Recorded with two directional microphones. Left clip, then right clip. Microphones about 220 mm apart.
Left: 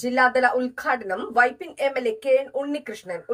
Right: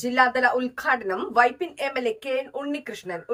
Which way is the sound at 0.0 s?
5° right (ahead or behind).